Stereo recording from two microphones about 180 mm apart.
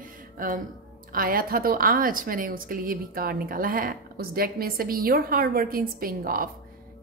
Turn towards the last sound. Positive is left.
turn(degrees=-55)  # may be behind; listen again after turning